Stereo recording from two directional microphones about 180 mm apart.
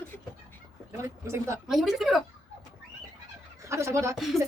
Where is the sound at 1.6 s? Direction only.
Centre (ahead or behind).